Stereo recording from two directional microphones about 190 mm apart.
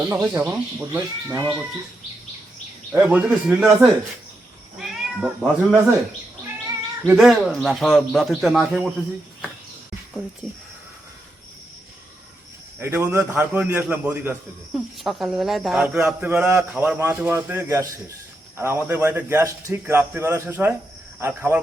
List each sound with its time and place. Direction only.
0.1 s a man's voice: 15° right (ahead or behind)
2.9 s a man's voice: 10° right (ahead or behind)
6.7 s cat: 10° right (ahead or behind)
7.2 s a man's voice: centre (ahead or behind)
12.8 s a man's voice: 10° right (ahead or behind)